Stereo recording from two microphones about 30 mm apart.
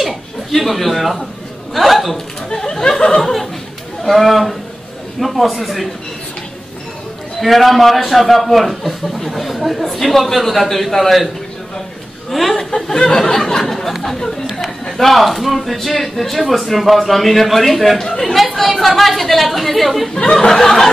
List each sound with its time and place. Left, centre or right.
0.6 s a man's voice: centre
2.5 s speech: centre
4.1 s speech: centre
7.3 s speech: centre
12.3 s speech: centre
12.9 s speech: left
13.4 s speech: centre
14.4 s speech: centre
14.9 s speech: centre
20.2 s speech: left
20.5 s speech: centre